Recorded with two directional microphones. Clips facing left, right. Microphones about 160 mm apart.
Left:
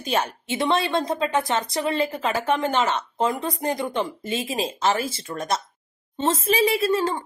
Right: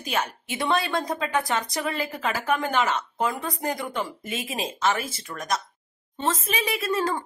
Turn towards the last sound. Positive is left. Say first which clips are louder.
# left 4 dB
turn(degrees=30)  # may be behind; listen again after turning